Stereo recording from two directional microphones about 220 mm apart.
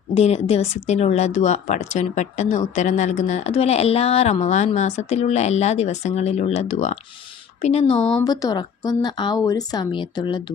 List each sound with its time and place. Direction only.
0.1 s speech: 30° left (ahead or behind)
8.2 s speech: 15° left (ahead or behind)